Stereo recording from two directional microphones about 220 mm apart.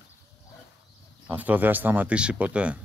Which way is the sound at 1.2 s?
5° right (ahead or behind).